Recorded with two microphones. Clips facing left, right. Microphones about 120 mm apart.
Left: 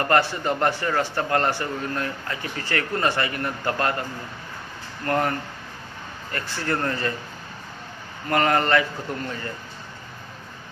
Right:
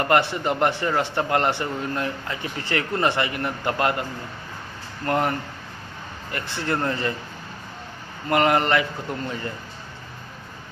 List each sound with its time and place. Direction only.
0.0 s speech: 20° right (ahead or behind)
5.0 s speech: 20° right (ahead or behind)
6.3 s speech: 20° right (ahead or behind)
8.3 s speech: 20° right (ahead or behind)